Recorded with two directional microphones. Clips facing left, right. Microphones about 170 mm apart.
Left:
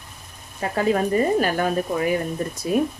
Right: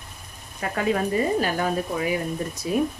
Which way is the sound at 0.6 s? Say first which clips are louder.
Left 3 dB; 30° left (ahead or behind).